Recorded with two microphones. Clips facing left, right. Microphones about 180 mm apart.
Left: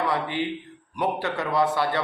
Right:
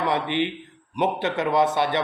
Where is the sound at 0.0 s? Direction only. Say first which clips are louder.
Right 2 dB; 20° right (ahead or behind).